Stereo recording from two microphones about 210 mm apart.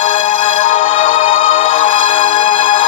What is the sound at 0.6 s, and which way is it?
Music, 70° left (ahead or behind).